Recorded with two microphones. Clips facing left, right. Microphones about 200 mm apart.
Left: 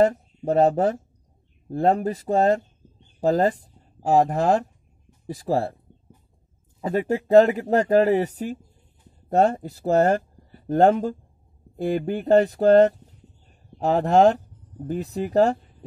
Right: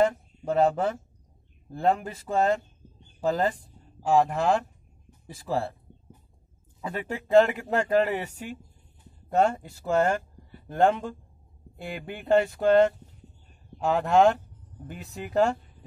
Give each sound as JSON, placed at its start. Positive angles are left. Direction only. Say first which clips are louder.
{"t": 0.0, "sound": "speech", "louder": "left 4 dB", "side_deg": 40}
{"t": 6.8, "sound": "speech", "louder": "left 9 dB", "side_deg": 40}